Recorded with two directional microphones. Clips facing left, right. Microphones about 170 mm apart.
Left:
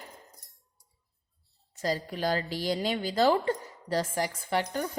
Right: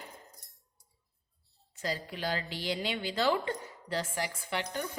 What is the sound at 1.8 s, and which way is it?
A woman's voice, 40° left (ahead or behind).